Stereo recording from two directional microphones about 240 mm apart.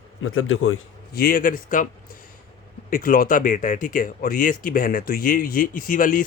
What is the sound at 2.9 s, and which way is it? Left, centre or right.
Speech, left.